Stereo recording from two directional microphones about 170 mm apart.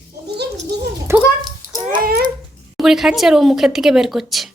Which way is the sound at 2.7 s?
Centre (ahead or behind).